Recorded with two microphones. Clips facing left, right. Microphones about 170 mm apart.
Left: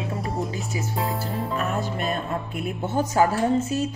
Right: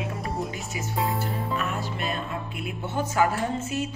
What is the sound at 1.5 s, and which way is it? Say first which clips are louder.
Speech: left 3 dB; 40° left (ahead or behind).